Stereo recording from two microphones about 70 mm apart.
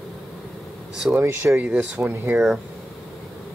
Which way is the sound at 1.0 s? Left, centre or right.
Right.